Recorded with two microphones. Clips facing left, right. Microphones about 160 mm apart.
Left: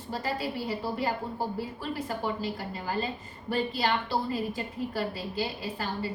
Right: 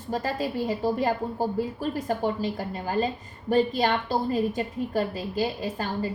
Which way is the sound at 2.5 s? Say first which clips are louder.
Right 5 dB; 45° right (ahead or behind).